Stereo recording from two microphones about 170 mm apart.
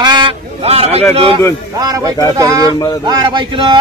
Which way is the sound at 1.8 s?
20° right (ahead or behind).